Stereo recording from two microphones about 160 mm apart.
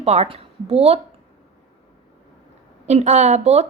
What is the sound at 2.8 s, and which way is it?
Speech, 45° right (ahead or behind).